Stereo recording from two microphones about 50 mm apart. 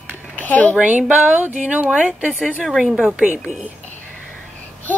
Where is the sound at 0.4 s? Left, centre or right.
Left.